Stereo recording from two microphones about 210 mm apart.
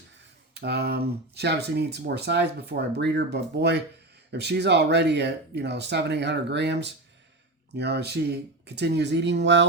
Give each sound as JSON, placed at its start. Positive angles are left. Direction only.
{"t": 0.5, "sound": "speech", "side_deg": -50}